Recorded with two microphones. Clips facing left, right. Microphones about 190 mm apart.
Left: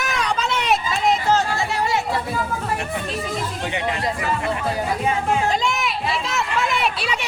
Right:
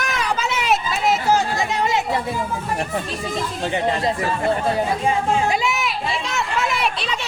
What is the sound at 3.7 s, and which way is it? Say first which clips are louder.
Speech: right 5 dB; 35° right (ahead or behind).